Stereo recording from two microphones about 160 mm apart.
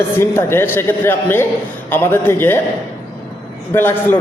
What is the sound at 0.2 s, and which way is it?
A man's voice, 15° left (ahead or behind).